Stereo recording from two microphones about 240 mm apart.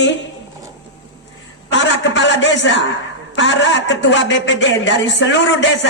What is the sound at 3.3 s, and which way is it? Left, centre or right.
Speech, left.